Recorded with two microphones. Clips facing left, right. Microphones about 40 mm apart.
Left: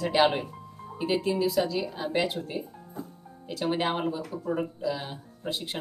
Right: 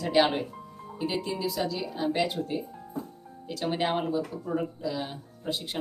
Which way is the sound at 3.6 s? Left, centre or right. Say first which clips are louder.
Left 1 dB; centre.